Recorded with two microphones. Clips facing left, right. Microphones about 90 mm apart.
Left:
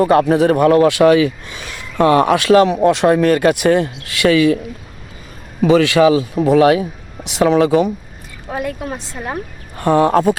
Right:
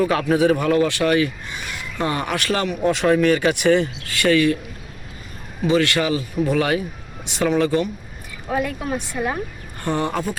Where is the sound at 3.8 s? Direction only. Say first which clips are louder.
Left 4 dB; 90° left.